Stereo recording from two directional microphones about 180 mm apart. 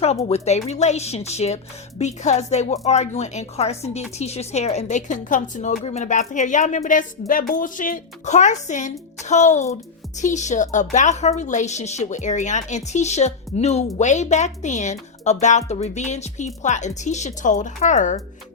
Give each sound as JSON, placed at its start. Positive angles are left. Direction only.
{"t": 0.0, "sound": "a woman's voice", "side_deg": 35}